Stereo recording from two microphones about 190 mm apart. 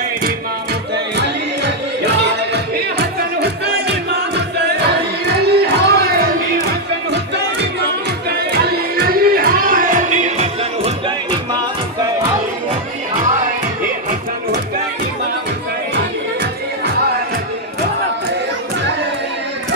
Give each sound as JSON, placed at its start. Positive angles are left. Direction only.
{"t": 0.9, "sound": "music", "side_deg": -65}
{"t": 4.7, "sound": "music", "side_deg": -60}
{"t": 8.3, "sound": "music", "side_deg": -60}